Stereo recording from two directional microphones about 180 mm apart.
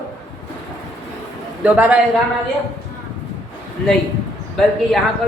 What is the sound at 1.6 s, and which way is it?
Speech, 10° right (ahead or behind).